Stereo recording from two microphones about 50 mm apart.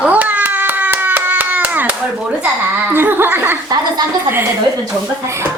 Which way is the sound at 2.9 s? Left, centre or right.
Right.